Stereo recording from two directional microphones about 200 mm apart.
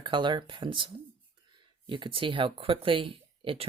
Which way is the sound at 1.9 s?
25° right (ahead or behind).